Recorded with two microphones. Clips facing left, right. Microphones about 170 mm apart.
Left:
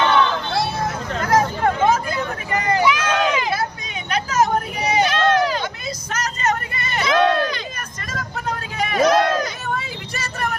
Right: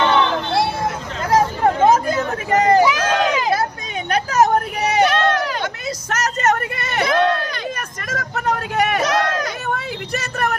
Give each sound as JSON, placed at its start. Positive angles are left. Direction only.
{"t": 0.1, "sound": "a sound", "side_deg": -25}
{"t": 1.8, "sound": "a sound", "side_deg": -40}
{"t": 4.9, "sound": "run", "side_deg": -65}
{"t": 6.1, "sound": "vehicle", "side_deg": -80}
{"t": 6.7, "sound": "crowd", "side_deg": -70}
{"t": 8.1, "sound": "vehicle", "side_deg": -75}
{"t": 9.7, "sound": "vehicle", "side_deg": -60}